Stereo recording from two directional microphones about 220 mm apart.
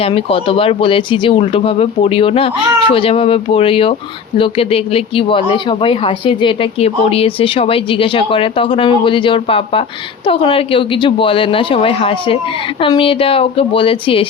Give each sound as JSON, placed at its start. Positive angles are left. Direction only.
{"t": 0.0, "sound": "speech", "side_deg": 25}